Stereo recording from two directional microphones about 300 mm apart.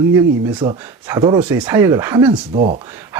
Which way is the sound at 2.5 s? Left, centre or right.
Right.